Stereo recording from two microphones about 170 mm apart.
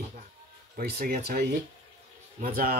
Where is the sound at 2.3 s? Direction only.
55° right (ahead or behind).